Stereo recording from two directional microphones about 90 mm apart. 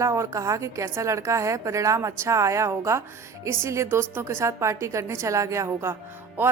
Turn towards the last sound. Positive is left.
turn(degrees=-25)  # may be behind; listen again after turning